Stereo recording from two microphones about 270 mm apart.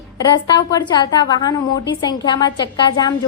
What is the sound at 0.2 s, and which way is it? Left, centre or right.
A woman's voice, centre.